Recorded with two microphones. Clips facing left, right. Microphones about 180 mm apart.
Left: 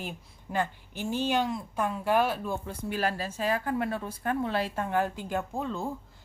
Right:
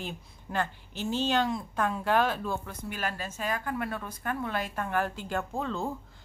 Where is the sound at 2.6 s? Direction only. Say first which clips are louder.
Left 5 dB; 30° left (ahead or behind).